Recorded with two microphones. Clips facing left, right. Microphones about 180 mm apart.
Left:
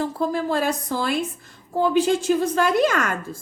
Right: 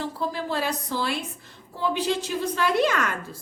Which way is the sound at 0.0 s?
45° left (ahead or behind).